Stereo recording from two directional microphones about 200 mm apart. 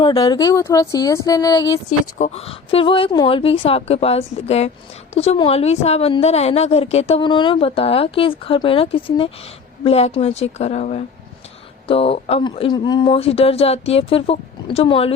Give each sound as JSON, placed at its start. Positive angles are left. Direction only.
{"t": 0.0, "sound": "speech", "side_deg": 25}
{"t": 2.1, "sound": "a woman's voice", "side_deg": 35}